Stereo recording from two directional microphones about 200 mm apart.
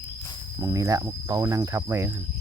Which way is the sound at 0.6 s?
15° right (ahead or behind).